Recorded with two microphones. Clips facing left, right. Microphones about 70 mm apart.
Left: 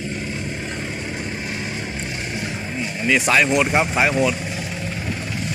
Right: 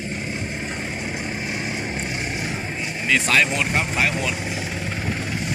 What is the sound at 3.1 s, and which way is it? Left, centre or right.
Speech, centre.